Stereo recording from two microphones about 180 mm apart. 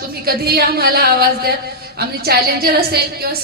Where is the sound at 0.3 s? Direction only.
60° right (ahead or behind).